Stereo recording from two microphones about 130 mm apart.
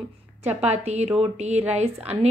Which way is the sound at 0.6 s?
55° right (ahead or behind).